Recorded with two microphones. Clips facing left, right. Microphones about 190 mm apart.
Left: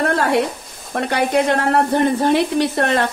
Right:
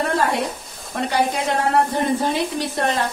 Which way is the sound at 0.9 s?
60° left (ahead or behind).